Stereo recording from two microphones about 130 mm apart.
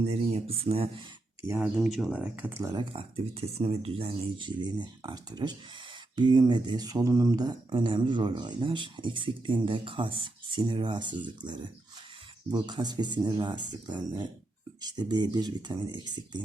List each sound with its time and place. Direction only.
0.0 s speech: 55° right (ahead or behind)
1.5 s speech: 5° right (ahead or behind)
2.7 s speech: 45° right (ahead or behind)